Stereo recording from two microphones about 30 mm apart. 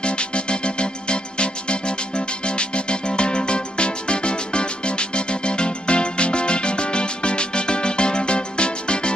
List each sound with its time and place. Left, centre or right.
0.0 s music: left